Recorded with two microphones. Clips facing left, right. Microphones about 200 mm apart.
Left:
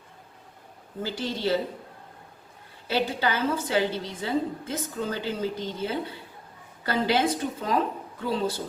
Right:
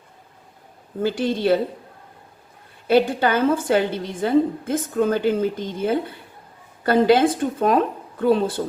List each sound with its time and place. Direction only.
1.0 s a woman's voice: 55° right (ahead or behind)
2.9 s a woman's voice: 50° right (ahead or behind)